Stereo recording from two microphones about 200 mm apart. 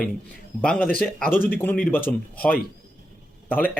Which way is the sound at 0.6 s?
5° left (ahead or behind).